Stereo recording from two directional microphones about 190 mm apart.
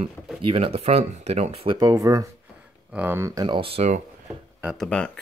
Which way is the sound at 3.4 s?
30° right (ahead or behind).